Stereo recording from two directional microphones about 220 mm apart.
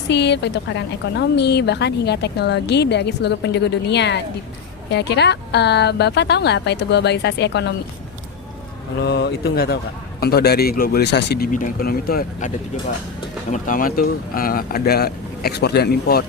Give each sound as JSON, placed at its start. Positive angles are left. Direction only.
{"t": 0.1, "sound": "a woman's voice", "side_deg": 50}
{"t": 9.0, "sound": "a woman's voice", "side_deg": 50}
{"t": 13.5, "sound": "a woman's voice", "side_deg": 40}